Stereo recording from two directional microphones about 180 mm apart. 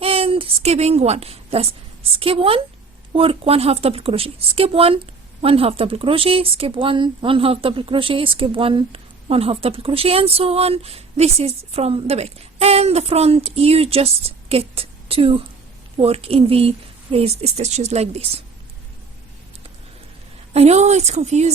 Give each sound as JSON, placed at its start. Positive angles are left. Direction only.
{"t": 0.0, "sound": "a woman's voice", "side_deg": -30}
{"t": 20.5, "sound": "speech", "side_deg": -35}